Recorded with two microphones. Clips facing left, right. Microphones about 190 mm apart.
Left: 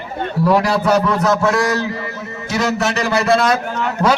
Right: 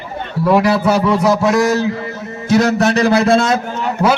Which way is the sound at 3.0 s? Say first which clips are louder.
Right 1 dB; 30° right (ahead or behind).